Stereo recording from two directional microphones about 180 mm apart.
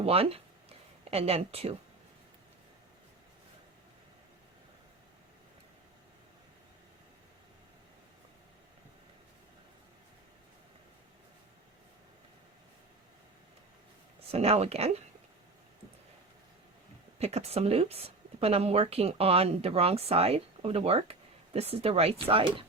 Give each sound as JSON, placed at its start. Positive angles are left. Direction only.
{"t": 0.0, "sound": "a sound", "side_deg": -35}
{"t": 14.3, "sound": "speech", "side_deg": -35}
{"t": 17.2, "sound": "speech", "side_deg": -35}